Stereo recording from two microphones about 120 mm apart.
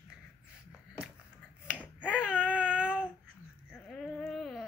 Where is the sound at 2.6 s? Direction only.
10° right (ahead or behind).